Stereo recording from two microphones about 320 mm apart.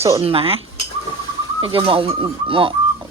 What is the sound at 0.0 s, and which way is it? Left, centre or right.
Speech, centre.